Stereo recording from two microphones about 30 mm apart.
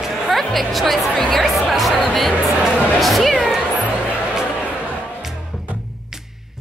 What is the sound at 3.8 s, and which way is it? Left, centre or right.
Music, right.